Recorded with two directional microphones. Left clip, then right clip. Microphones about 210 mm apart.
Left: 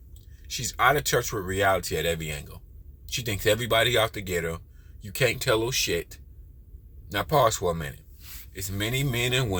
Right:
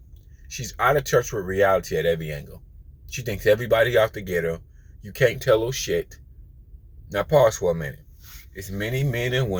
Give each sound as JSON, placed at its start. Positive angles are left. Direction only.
{"t": 0.5, "sound": "speech", "side_deg": 15}